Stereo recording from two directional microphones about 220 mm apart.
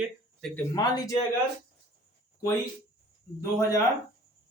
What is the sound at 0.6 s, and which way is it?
Speech, 15° left (ahead or behind).